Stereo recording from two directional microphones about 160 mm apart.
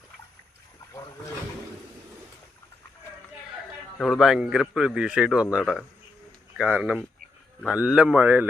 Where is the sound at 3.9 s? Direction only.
Centre (ahead or behind).